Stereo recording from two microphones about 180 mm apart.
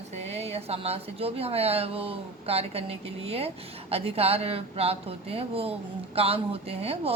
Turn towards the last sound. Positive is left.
turn(degrees=-35)  # may be behind; listen again after turning